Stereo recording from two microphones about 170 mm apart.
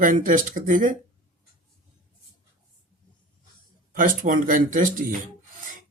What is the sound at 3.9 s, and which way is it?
Speech, 55° right (ahead or behind).